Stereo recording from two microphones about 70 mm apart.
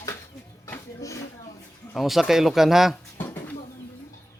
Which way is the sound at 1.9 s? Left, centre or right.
Centre.